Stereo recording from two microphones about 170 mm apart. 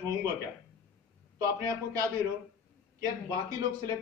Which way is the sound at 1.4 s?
20° right (ahead or behind).